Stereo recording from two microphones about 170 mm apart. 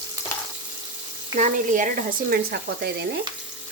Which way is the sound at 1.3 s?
50° right (ahead or behind).